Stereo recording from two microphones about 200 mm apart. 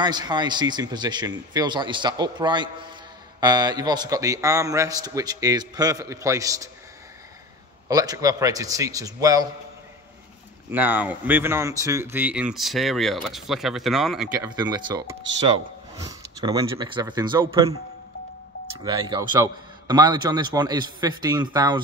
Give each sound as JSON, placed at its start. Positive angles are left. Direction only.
{"t": 0.0, "sound": "a man's voice", "side_deg": -20}
{"t": 7.9, "sound": "a man's voice", "side_deg": -20}
{"t": 10.7, "sound": "speech", "side_deg": -10}
{"t": 14.4, "sound": "a man's voice", "side_deg": -20}
{"t": 18.9, "sound": "a man's voice", "side_deg": -20}